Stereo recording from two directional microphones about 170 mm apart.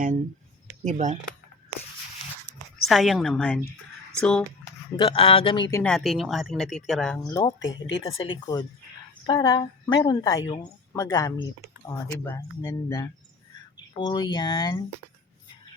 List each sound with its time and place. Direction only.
0.9 s speech: 40° right (ahead or behind)
2.5 s a sound: 10° right (ahead or behind)
2.8 s speech: centre (ahead or behind)
4.9 s speech: 30° left (ahead or behind)
5.7 s speech: 5° left (ahead or behind)
7.3 s a woman's voice: 20° left (ahead or behind)
7.6 s speech: 90° left
8.0 s a woman's voice: 25° left (ahead or behind)